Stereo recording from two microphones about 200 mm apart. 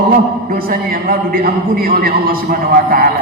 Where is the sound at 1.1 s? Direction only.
45° right (ahead or behind).